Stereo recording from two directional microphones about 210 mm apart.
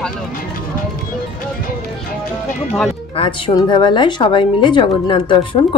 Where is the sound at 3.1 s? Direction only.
25° left (ahead or behind).